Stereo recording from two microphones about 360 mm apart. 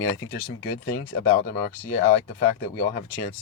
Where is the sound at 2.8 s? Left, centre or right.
Left.